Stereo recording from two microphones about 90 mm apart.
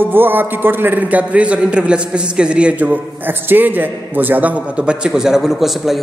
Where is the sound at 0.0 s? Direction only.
25° right (ahead or behind).